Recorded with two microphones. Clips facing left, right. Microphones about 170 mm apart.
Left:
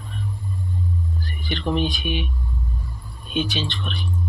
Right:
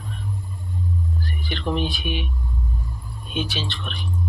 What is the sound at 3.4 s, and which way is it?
Speech, 5° right (ahead or behind).